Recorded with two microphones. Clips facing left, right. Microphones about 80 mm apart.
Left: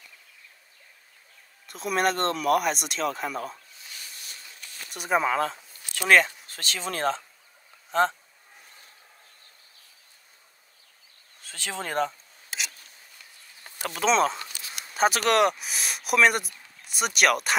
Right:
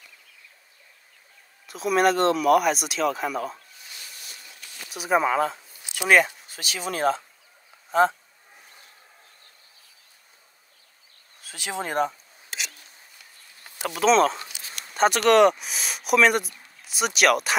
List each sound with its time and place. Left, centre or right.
1.7 s speech: centre
4.8 s speech: centre
11.4 s speech: centre
12.4 s a sound: centre
13.7 s speech: centre